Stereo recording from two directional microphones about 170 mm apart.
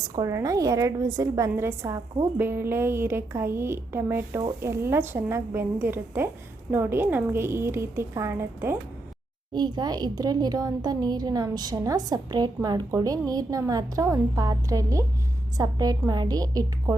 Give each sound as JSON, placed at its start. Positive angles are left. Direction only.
{"t": 0.2, "sound": "a woman's voice", "side_deg": -20}
{"t": 9.5, "sound": "a woman's voice", "side_deg": -25}